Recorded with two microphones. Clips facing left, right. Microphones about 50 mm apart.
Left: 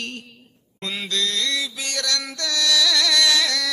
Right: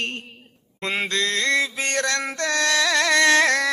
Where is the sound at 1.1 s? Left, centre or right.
Right.